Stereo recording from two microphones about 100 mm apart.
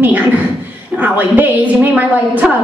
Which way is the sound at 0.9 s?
15° right (ahead or behind).